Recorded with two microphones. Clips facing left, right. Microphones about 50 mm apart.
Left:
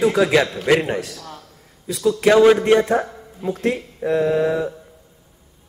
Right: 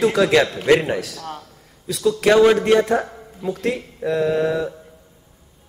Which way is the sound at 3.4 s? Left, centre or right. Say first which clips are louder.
Left 1 dB; left.